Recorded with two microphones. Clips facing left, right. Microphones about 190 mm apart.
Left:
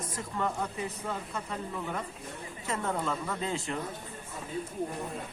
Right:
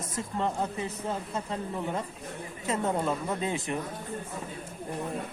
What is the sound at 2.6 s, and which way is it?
Speech, 20° right (ahead or behind).